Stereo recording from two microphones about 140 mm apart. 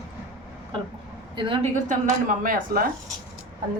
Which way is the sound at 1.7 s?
65° right (ahead or behind).